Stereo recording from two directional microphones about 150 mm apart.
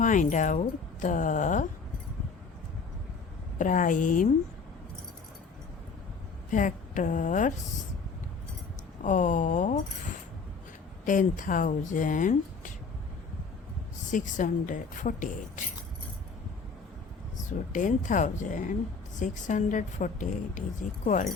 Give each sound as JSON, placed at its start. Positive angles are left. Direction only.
{"t": 0.0, "sound": "a woman's voice", "side_deg": 60}
{"t": 3.6, "sound": "a woman's voice", "side_deg": 60}
{"t": 6.5, "sound": "a woman's voice", "side_deg": 60}
{"t": 9.0, "sound": "a woman's voice", "side_deg": 55}
{"t": 11.0, "sound": "a woman's voice", "side_deg": 60}
{"t": 14.1, "sound": "a woman's voice", "side_deg": 55}
{"t": 17.7, "sound": "a woman's voice", "side_deg": 60}